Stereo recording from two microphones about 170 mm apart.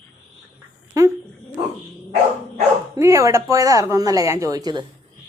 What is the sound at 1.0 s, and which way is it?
Speech, 20° right (ahead or behind).